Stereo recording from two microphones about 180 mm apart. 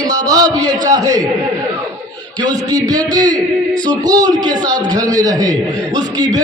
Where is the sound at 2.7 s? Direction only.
20° right (ahead or behind).